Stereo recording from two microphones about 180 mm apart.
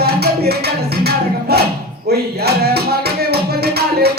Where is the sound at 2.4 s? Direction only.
60° right (ahead or behind).